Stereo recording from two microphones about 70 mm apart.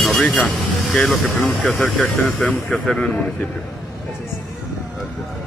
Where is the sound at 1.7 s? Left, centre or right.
Centre.